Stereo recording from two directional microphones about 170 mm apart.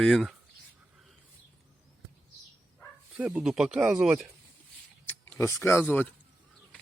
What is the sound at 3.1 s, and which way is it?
Speech, 5° right (ahead or behind).